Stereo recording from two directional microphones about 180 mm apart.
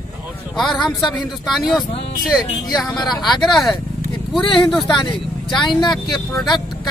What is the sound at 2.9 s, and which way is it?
Speech, 20° left (ahead or behind).